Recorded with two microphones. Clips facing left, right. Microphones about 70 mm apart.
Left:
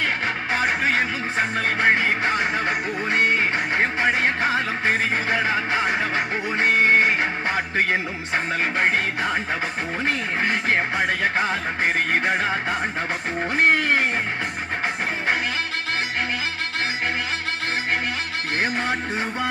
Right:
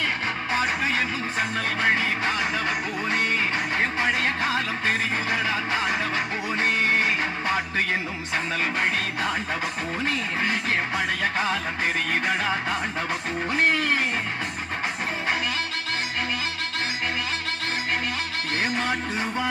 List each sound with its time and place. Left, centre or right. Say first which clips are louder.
0.5 s music: left 3 dB; left
10.0 s music: left 3 dB; left
13.5 s music: left 4 dB; left